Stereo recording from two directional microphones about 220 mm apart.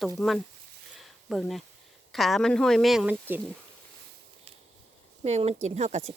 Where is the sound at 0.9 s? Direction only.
Centre (ahead or behind).